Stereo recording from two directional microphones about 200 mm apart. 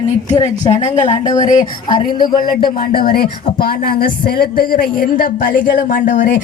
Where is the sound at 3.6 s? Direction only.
50° left (ahead or behind).